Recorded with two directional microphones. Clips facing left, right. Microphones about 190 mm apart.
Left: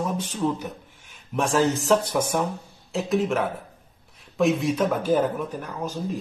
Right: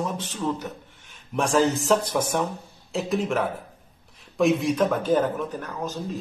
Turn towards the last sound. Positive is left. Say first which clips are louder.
# even
turn(degrees=10)  # may be behind; listen again after turning